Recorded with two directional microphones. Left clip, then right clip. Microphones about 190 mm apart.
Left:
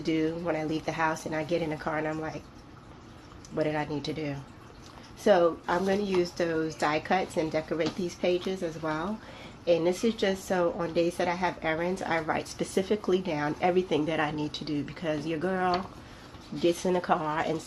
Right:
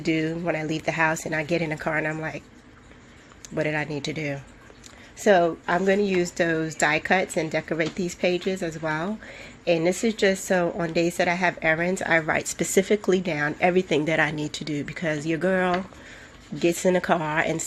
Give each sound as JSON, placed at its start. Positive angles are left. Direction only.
{"t": 0.0, "sound": "a woman's voice", "side_deg": -50}
{"t": 3.5, "sound": "a woman's voice", "side_deg": -50}